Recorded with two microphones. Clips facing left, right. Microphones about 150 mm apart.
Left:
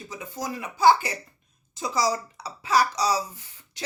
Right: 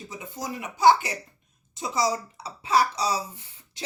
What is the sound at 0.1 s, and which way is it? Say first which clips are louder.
A woman's voice: left 2 dB; 25° right (ahead or behind).